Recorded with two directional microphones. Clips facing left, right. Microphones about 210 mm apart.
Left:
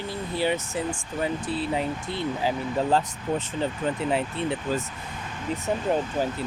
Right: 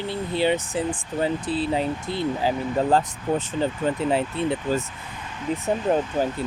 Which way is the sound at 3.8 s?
35° right (ahead or behind).